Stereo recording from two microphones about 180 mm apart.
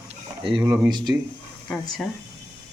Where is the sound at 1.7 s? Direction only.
Centre (ahead or behind).